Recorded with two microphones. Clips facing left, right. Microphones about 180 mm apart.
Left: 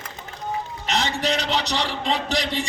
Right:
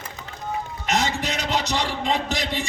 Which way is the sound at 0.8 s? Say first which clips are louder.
Even; 45° right (ahead or behind).